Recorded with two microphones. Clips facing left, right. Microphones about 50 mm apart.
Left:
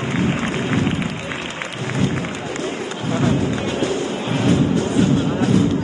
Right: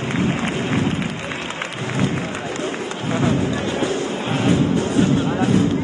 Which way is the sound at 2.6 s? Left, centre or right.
Right.